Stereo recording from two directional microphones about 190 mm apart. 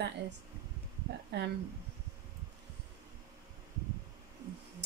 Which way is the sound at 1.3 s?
60° right (ahead or behind).